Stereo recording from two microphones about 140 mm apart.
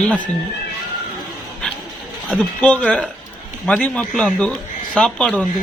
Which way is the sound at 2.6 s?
10° left (ahead or behind).